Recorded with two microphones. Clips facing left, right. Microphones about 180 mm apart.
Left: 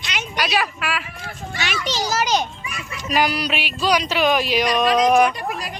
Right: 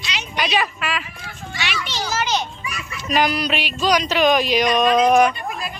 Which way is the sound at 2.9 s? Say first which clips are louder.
Right 1 dB; 10° left (ahead or behind).